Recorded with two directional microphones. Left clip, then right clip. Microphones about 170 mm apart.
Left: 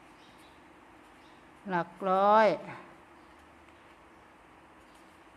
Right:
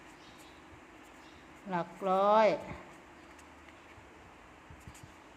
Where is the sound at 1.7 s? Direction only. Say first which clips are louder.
Left 3 dB; 25° left (ahead or behind).